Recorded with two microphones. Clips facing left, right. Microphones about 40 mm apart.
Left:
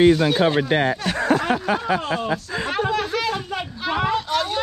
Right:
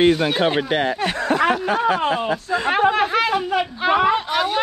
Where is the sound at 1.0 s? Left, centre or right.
Right.